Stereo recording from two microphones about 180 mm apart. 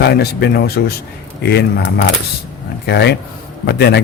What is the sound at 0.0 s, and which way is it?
A man's voice, 65° left (ahead or behind).